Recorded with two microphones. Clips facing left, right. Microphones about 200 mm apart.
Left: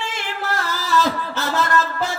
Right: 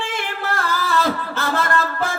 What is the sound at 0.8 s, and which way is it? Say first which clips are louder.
Music: left 2 dB; 55° right (ahead or behind).